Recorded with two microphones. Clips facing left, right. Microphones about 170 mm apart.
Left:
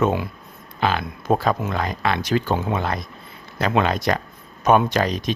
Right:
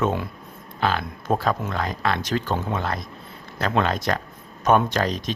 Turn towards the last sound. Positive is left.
turn(degrees=10)  # may be behind; listen again after turning